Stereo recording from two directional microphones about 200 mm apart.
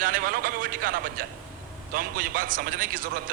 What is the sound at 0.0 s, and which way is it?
A man's voice, 45° right (ahead or behind).